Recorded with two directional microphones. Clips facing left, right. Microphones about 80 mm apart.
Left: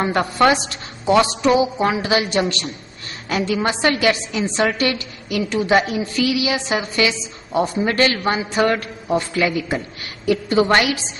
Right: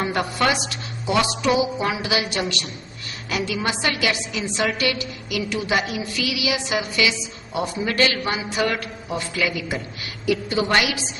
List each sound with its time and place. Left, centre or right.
0.0 s a woman's voice: left